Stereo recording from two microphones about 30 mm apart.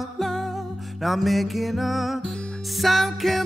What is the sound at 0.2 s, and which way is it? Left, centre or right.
Music, centre.